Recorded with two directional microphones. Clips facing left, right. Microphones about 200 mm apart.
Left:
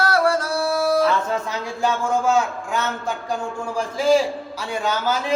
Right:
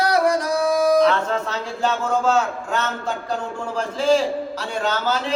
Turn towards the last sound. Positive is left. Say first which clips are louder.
# even
turn(degrees=10)  # may be behind; listen again after turning